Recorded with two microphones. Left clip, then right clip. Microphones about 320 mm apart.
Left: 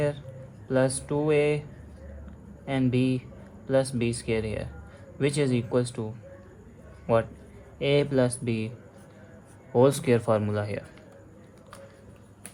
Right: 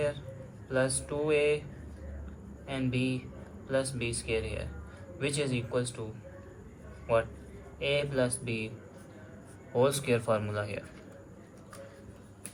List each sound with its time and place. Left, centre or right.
0.7 s speech: left
2.6 s speech: left
7.1 s speech: left
9.7 s speech: left